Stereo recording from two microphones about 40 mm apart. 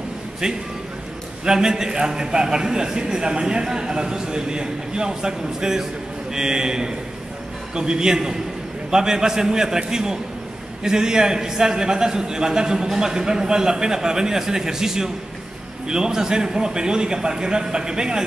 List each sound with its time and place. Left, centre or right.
1.4 s a man's voice: centre